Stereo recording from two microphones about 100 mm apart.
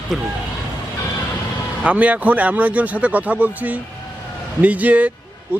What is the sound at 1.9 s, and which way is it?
Speech, 15° right (ahead or behind).